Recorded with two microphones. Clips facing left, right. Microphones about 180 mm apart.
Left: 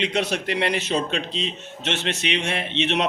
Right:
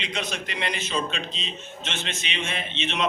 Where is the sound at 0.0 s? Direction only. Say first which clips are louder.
Left 8 dB; 65° left (ahead or behind).